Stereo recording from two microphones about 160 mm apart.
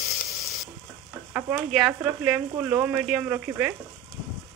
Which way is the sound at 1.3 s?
15° right (ahead or behind).